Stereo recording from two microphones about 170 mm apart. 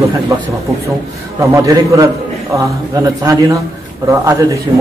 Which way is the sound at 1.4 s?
20° right (ahead or behind).